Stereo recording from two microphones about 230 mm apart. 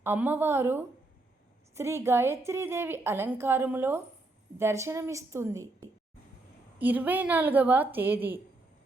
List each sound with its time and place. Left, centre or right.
0.0 s a woman's voice: centre
6.7 s a woman's voice: centre